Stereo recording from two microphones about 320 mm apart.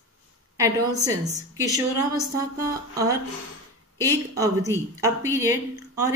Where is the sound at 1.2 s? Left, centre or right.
Right.